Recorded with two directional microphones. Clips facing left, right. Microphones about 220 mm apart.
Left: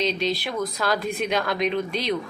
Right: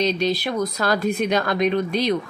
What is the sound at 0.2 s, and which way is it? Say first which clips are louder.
Speech: right 4 dB; 45° right (ahead or behind).